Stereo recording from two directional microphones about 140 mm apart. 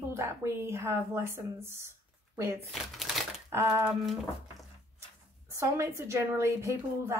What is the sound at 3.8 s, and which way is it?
Speech, centre (ahead or behind).